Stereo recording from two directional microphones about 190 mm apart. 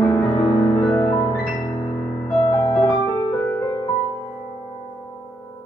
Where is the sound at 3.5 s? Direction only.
10° left (ahead or behind).